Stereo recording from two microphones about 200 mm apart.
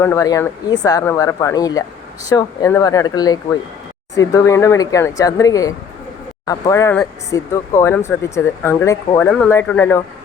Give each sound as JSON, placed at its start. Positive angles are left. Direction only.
{"t": 0.0, "sound": "speech", "side_deg": 15}